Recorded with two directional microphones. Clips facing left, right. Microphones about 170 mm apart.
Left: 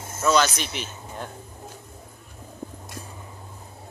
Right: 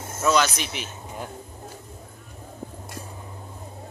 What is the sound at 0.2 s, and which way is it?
Speech, 5° right (ahead or behind).